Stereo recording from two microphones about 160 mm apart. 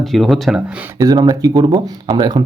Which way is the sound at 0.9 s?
25° right (ahead or behind).